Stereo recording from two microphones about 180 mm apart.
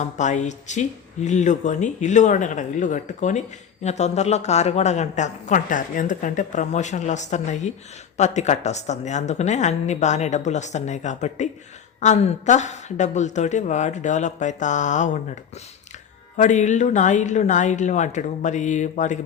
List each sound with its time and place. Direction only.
0.0 s a woman's voice: 40° left (ahead or behind)
16.4 s speech: 40° left (ahead or behind)